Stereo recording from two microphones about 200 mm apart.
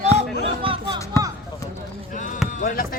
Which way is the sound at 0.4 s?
25° right (ahead or behind).